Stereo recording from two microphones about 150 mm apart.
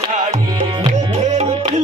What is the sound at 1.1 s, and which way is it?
Music, 50° right (ahead or behind).